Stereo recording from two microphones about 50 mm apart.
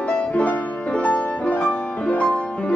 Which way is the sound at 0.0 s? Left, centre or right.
Left.